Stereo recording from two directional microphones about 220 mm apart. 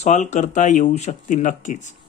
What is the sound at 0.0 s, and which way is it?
Speech, 30° left (ahead or behind).